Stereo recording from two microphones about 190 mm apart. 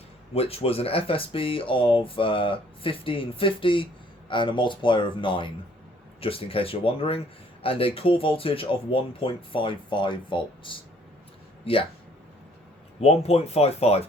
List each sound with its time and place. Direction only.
0.3 s speech: 30° left (ahead or behind)
13.0 s speech: 35° left (ahead or behind)